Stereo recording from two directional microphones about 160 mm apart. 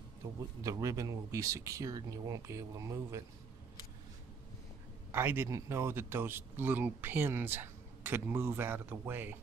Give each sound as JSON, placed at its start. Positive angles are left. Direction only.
{"t": 0.7, "sound": "speech", "side_deg": -20}
{"t": 5.1, "sound": "a man's voice", "side_deg": -15}